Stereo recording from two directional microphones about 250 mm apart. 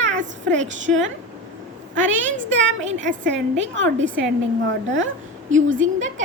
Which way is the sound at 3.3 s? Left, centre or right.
Right.